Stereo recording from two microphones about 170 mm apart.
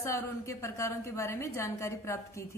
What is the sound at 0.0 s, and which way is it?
A woman's voice, 15° left (ahead or behind).